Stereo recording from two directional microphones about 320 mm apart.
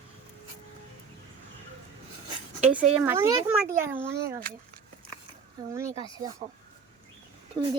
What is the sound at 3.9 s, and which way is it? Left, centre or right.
Speech, right.